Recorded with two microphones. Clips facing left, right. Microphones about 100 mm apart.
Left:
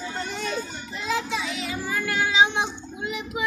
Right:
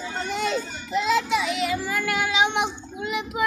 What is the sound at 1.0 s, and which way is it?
Child singing, 75° right (ahead or behind).